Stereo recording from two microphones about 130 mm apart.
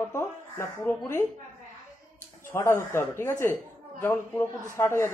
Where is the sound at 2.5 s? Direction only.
20° left (ahead or behind).